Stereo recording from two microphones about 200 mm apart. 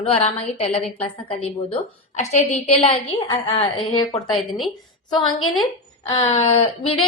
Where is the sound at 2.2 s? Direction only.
35° left (ahead or behind).